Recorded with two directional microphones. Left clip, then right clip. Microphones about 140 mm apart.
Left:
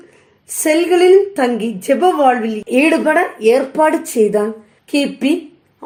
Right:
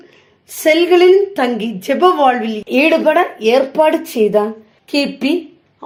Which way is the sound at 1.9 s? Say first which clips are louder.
Left 2 dB; 30° right (ahead or behind).